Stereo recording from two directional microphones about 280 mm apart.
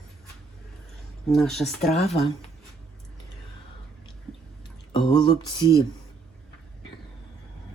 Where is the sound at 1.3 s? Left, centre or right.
Centre.